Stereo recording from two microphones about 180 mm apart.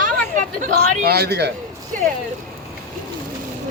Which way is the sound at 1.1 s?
65° right (ahead or behind).